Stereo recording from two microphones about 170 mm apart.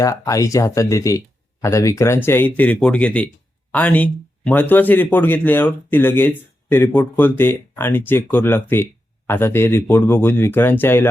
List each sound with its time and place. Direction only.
0.0 s a man's voice: 20° left (ahead or behind)